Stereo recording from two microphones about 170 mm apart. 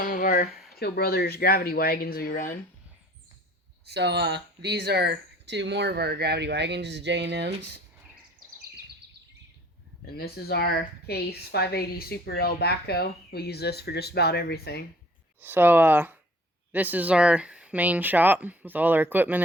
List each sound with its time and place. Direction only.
0.0 s a sound: 55° left (ahead or behind)
0.8 s speech: 65° left (ahead or behind)
3.8 s speech: 80° right
10.1 s speech: 65° left (ahead or behind)
15.4 s speech: 10° right (ahead or behind)